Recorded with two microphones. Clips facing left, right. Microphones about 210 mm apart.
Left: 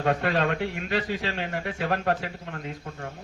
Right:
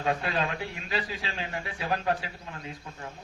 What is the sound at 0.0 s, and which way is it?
A man's voice, 55° left (ahead or behind).